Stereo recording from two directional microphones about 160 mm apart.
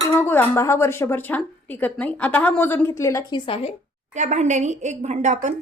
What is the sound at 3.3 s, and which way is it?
Speech, 35° left (ahead or behind).